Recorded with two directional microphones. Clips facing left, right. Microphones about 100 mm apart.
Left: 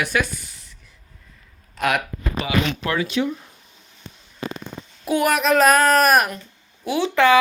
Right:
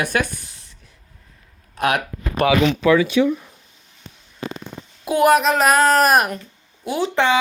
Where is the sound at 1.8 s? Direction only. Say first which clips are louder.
Right 2 dB; 45° right (ahead or behind).